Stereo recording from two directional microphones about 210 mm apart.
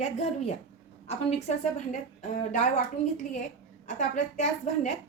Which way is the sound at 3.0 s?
30° left (ahead or behind).